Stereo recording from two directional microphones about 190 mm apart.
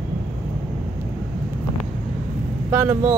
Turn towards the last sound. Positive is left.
turn(degrees=-10)  # may be behind; listen again after turning